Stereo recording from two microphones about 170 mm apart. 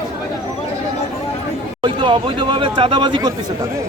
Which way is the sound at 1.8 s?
30° right (ahead or behind).